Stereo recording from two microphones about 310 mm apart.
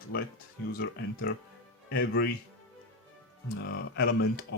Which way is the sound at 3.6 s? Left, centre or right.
Left.